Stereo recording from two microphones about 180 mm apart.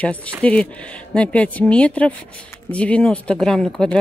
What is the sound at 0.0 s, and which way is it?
Speech, 5° left (ahead or behind).